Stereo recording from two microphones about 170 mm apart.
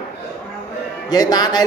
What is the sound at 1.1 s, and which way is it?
Speech, 25° left (ahead or behind).